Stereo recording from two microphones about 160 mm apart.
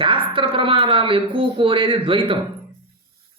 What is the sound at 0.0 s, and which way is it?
Speech, 30° right (ahead or behind).